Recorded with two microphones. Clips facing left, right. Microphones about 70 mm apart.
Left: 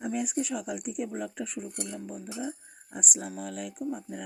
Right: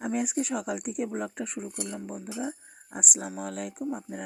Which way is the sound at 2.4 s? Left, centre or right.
Right.